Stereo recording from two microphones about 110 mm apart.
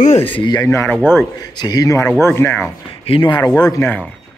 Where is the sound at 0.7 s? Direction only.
25° left (ahead or behind).